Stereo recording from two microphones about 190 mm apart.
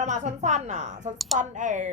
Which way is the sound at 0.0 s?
40° right (ahead or behind).